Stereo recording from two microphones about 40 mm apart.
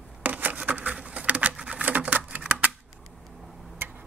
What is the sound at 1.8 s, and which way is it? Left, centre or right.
Typewriter, right.